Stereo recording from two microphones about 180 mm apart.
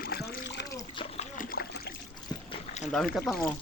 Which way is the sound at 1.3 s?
50° left (ahead or behind).